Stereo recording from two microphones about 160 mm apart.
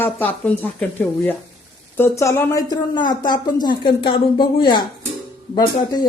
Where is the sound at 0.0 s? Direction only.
10° left (ahead or behind).